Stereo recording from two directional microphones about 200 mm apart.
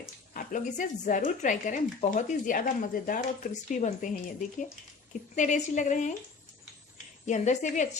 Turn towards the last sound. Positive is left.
turn(degrees=35)  # may be behind; listen again after turning